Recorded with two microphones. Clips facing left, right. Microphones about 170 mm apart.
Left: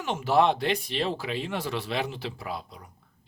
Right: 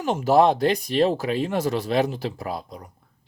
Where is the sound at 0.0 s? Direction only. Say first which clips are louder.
Right 5 dB; 40° right (ahead or behind).